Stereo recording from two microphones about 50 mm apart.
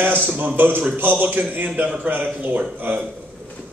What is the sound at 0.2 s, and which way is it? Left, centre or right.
A man's voice, right.